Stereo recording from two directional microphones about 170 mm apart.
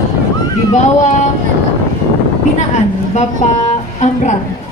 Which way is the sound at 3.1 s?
45° left (ahead or behind).